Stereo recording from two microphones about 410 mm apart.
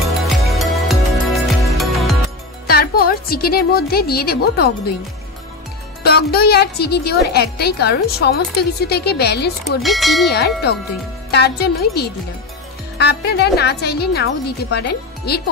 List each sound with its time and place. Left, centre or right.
0.2 s music: centre
2.6 s speech: left
6.0 s a woman's voice: left
9.8 s bell: centre
10.2 s a woman's voice: left